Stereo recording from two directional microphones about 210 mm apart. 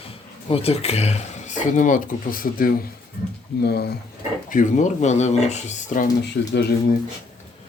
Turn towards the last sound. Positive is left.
turn(degrees=55)  # may be behind; listen again after turning